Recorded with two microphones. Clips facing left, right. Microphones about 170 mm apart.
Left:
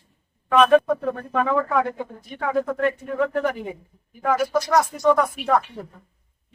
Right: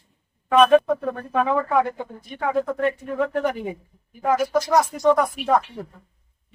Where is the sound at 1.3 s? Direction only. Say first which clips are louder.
Right 2 dB; 10° right (ahead or behind).